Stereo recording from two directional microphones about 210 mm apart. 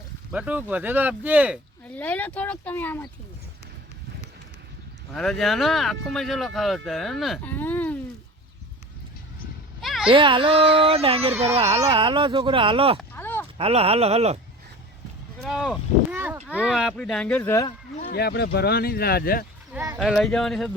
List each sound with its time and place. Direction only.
0.3 s speech: 5° right (ahead or behind)
2.0 s speech: 10° left (ahead or behind)
5.1 s speech: centre (ahead or behind)
9.8 s a sound: centre (ahead or behind)
10.1 s a child's voice: 25° right (ahead or behind)
13.0 s a sound: 10° left (ahead or behind)
13.6 s a child's voice: 25° right (ahead or behind)
15.4 s speech: centre (ahead or behind); by 17.7 s 15° left (ahead or behind)
18.1 s speech: 50° left (ahead or behind)
19.7 s a sound: 15° right (ahead or behind)
20.0 s speech: centre (ahead or behind)